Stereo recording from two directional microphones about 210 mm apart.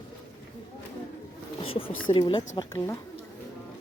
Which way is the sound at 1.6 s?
25° left (ahead or behind).